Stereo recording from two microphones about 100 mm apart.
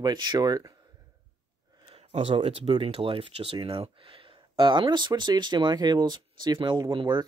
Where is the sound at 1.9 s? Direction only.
80° right; by 7.2 s 50° right (ahead or behind).